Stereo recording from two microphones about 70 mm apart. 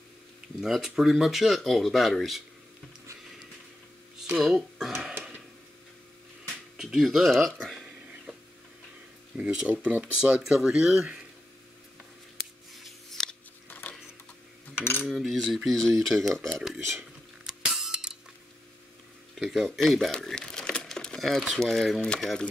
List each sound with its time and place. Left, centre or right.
0.6 s speech: centre
4.4 s speech: centre
6.8 s speech: centre
9.4 s speech: centre
12.7 s scissors: centre
13.7 s a sound: left
15.0 s speech: centre
17.5 s a sound: centre
19.4 s speech: centre
19.8 s speech: centre